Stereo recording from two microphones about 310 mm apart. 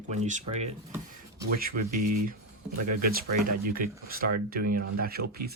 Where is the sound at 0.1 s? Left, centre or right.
Right.